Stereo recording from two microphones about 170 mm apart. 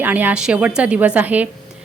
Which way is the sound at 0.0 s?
10° right (ahead or behind).